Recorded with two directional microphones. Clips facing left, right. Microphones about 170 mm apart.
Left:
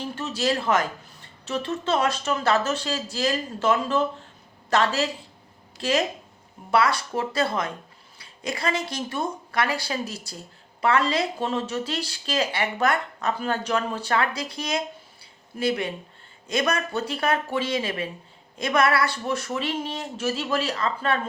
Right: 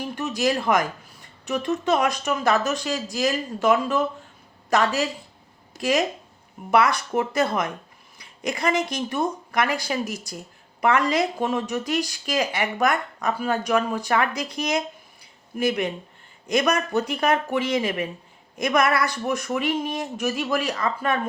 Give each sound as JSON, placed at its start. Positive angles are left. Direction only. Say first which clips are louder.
{"t": 0.0, "sound": "speech", "louder": "right 3 dB", "side_deg": -15}
{"t": 6.7, "sound": "speech", "louder": "right 2 dB", "side_deg": -15}